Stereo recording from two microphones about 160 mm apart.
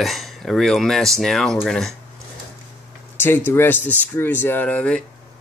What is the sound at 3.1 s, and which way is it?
Speech, 15° left (ahead or behind).